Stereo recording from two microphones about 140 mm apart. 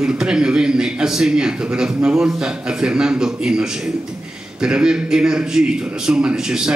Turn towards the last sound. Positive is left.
turn(degrees=-5)  # may be behind; listen again after turning